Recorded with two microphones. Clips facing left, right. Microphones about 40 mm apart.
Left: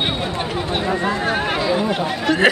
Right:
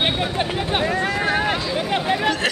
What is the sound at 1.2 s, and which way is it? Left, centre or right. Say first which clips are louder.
Speech: even; centre.